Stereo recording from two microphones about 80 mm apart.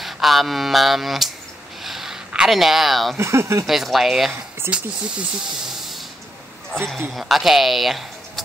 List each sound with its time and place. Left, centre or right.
0.0 s speech: centre
1.8 s a sound: centre
3.2 s speech: right
3.6 s speech: centre
4.6 s speech: centre
5.7 s hiss: centre
6.7 s speech: centre